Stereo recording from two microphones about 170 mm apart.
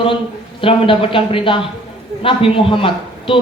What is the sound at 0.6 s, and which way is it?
A man's voice, 30° left (ahead or behind).